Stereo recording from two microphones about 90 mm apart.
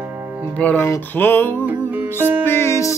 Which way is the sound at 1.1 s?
20° left (ahead or behind).